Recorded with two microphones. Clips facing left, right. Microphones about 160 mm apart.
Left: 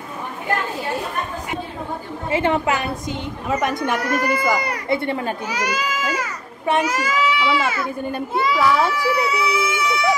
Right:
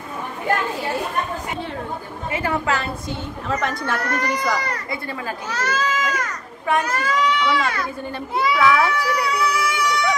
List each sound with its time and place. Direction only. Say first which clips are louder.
2.3 s a woman's voice: left 4 dB; 25° left (ahead or behind)
4.8 s speech: left 7 dB; 25° left (ahead or behind)
5.5 s speech: even; 10° left (ahead or behind)
8.8 s baby cry: left 2 dB; 5° left (ahead or behind)